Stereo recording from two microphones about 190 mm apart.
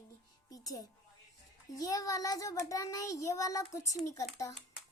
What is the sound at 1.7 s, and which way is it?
A child's voice, 20° left (ahead or behind).